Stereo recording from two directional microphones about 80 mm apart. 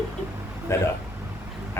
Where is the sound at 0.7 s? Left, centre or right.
Left.